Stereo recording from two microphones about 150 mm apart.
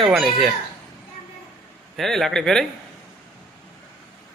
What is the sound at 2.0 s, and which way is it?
Speech, centre (ahead or behind).